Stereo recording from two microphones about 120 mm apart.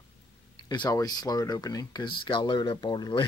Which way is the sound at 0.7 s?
35° left (ahead or behind).